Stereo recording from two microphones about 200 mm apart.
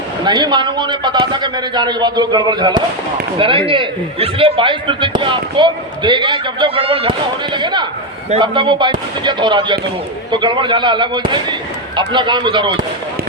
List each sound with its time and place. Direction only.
0.3 s speech: 20° right (ahead or behind)